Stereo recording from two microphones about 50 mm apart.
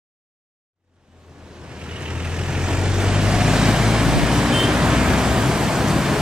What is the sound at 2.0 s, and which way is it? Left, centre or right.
Vehicle, centre.